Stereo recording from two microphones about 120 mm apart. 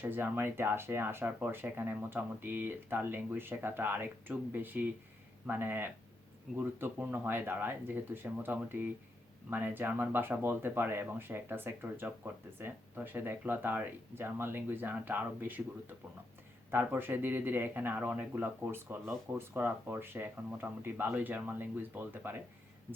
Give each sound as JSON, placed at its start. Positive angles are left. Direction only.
{"t": 0.0, "sound": "speech", "side_deg": -15}
{"t": 16.7, "sound": "speech", "side_deg": -15}